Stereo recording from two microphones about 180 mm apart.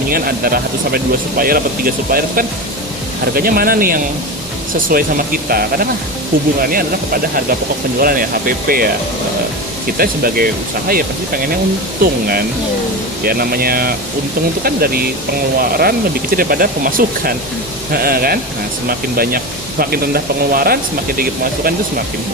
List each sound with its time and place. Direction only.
0.1 s speech: 55° right (ahead or behind)
10.0 s speech: 55° right (ahead or behind)
12.0 s speech: 50° right (ahead or behind)
13.2 s speech: 55° right (ahead or behind)